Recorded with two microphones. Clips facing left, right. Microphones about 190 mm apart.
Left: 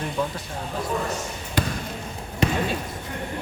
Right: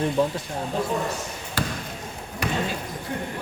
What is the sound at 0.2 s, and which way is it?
Speech, 30° right (ahead or behind).